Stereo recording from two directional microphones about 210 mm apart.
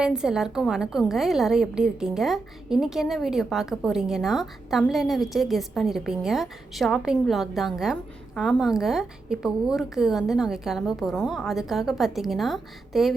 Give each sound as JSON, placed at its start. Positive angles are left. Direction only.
{"t": 0.0, "sound": "a woman's voice", "side_deg": -5}